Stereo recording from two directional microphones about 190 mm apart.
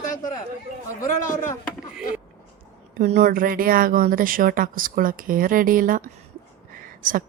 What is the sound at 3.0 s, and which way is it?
Speech, 35° right (ahead or behind).